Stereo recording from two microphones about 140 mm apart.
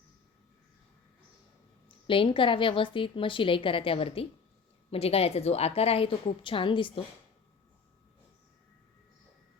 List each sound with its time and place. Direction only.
2.0 s a woman's voice: 40° left (ahead or behind)